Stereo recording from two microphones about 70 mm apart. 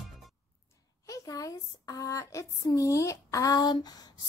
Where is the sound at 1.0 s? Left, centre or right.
Left.